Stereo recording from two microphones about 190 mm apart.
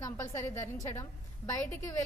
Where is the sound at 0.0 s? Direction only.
15° left (ahead or behind).